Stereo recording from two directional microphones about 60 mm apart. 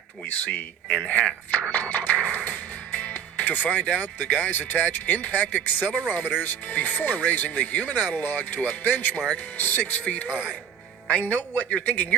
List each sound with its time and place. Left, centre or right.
0.3 s speech: left
1.0 s chopping: left
1.7 s speech: left